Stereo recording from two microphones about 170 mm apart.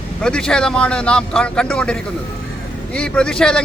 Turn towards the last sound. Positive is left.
turn(degrees=5)  # may be behind; listen again after turning